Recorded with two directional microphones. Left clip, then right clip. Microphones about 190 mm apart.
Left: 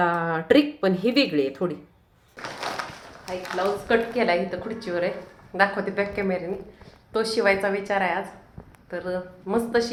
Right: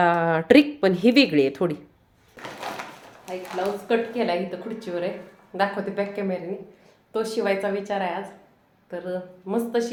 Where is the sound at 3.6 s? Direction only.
Centre (ahead or behind).